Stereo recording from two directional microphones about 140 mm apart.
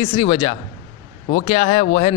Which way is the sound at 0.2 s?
45° left (ahead or behind).